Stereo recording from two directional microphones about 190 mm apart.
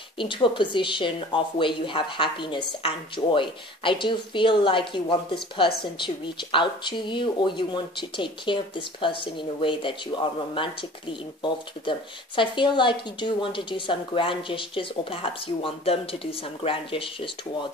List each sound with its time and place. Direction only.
0.2 s speech: 25° left (ahead or behind)